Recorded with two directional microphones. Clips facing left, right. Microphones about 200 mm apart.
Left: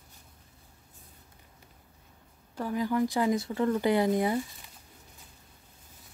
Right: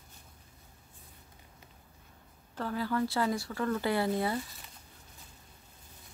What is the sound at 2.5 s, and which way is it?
Speech, 15° left (ahead or behind).